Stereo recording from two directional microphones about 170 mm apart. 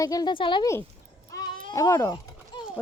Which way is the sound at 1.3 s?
25° left (ahead or behind).